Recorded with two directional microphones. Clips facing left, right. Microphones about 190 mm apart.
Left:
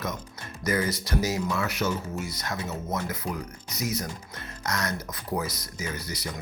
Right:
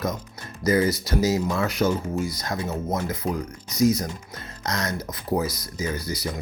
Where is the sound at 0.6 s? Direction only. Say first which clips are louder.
Right 6 dB; 30° right (ahead or behind).